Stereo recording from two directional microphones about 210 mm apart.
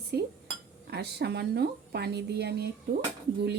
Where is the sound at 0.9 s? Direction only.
50° right (ahead or behind).